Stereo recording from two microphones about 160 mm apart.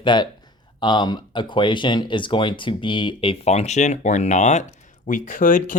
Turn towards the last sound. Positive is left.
turn(degrees=55)  # may be behind; listen again after turning